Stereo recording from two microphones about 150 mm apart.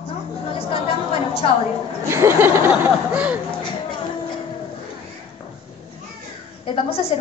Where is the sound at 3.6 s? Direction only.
30° left (ahead or behind).